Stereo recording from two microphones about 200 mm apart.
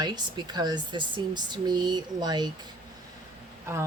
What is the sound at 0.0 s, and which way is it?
Speech, 20° right (ahead or behind).